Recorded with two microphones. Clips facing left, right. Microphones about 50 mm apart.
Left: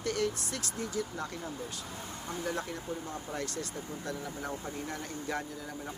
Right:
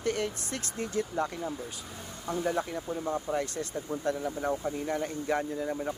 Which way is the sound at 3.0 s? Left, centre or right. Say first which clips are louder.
Right 7 dB; right.